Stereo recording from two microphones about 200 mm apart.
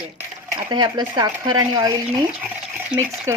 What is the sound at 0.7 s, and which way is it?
Speech, 20° right (ahead or behind).